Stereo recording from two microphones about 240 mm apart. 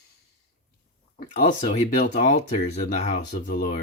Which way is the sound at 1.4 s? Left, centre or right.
Left.